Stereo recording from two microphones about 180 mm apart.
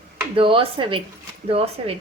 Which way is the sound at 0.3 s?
30° right (ahead or behind).